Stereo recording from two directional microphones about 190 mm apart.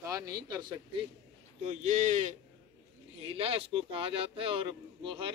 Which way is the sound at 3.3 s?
30° right (ahead or behind).